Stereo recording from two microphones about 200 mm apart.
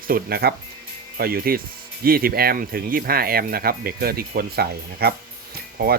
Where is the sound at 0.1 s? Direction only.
50° right (ahead or behind).